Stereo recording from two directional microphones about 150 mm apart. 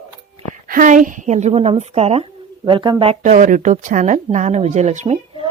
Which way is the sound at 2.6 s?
30° right (ahead or behind).